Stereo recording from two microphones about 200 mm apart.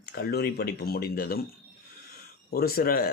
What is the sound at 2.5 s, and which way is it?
Speech, 50° left (ahead or behind).